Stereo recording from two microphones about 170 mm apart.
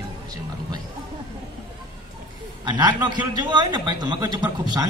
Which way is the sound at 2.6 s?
25° right (ahead or behind).